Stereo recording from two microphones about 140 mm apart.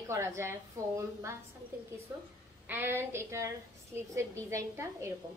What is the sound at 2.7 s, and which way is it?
A woman's voice, 15° right (ahead or behind).